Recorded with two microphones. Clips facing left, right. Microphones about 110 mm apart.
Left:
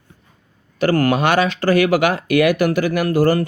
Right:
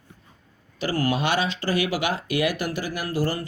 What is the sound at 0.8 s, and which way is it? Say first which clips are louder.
Speech: left 8 dB; 60° left (ahead or behind).